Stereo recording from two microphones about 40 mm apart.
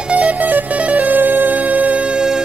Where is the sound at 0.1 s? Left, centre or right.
Right.